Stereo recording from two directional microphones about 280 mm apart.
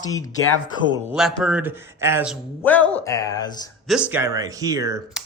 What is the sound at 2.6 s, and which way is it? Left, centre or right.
Speech, centre.